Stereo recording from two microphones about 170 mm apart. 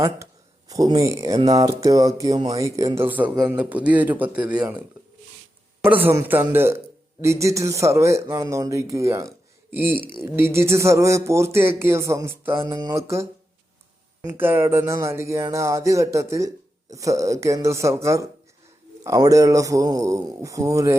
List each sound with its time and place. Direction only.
0.7 s a man's voice: 20° right (ahead or behind)
5.9 s a man's voice: 10° right (ahead or behind)
9.9 s speech: 30° left (ahead or behind)
10.2 s a man's voice: 15° right (ahead or behind)